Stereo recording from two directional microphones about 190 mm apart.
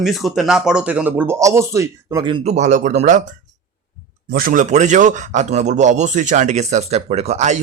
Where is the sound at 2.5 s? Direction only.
40° right (ahead or behind).